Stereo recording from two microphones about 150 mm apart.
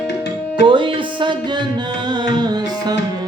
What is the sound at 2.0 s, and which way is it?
Tabla, 30° right (ahead or behind).